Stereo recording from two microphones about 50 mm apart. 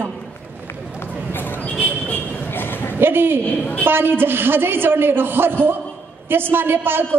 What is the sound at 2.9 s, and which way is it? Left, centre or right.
A woman's voice, right.